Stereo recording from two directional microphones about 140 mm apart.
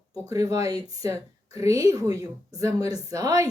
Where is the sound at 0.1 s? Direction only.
25° right (ahead or behind).